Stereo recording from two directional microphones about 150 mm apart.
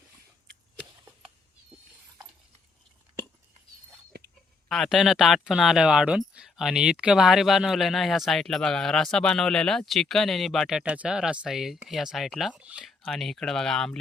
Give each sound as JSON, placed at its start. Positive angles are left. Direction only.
{"t": 4.7, "sound": "speech", "side_deg": 0}